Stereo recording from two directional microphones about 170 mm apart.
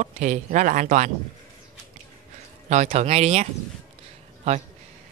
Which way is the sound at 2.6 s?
40° right (ahead or behind).